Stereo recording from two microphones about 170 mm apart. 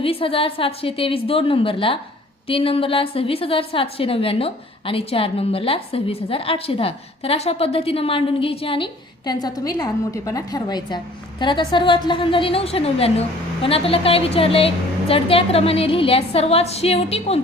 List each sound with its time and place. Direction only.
0.0 s a woman's voice: 35° left (ahead or behind)